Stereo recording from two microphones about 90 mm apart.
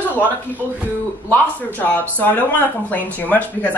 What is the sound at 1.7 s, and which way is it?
Speech, 20° left (ahead or behind).